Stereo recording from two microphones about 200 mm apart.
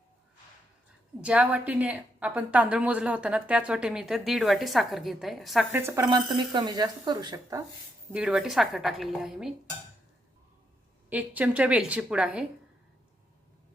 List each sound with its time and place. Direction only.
1.2 s a woman's voice: 5° right (ahead or behind)
5.8 s speech: 20° right (ahead or behind)
8.1 s a woman's voice: 5° right (ahead or behind)
11.1 s a woman's voice: 5° right (ahead or behind)